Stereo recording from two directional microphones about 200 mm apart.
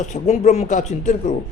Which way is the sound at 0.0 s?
35° left (ahead or behind).